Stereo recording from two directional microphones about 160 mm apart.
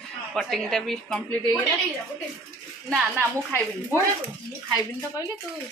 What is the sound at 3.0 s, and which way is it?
Speech, 15° right (ahead or behind).